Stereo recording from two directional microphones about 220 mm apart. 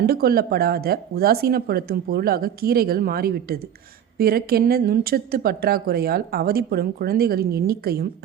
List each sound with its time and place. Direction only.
0.0 s speech: 45° right (ahead or behind)